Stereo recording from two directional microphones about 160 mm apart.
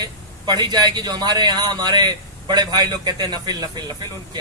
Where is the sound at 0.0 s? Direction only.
25° right (ahead or behind).